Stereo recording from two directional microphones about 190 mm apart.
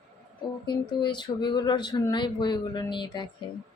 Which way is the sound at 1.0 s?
25° left (ahead or behind).